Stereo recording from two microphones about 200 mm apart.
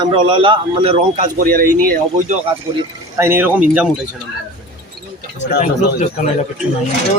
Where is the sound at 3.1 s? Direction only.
15° right (ahead or behind).